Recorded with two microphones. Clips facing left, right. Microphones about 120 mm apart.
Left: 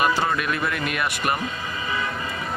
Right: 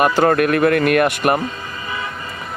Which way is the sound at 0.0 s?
55° right (ahead or behind).